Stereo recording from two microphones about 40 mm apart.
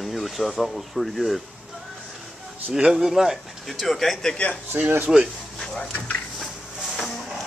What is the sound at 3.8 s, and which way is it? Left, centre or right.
Speech, centre.